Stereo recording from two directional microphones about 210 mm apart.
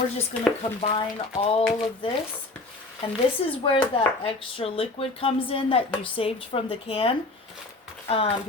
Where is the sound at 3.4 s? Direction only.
30° left (ahead or behind).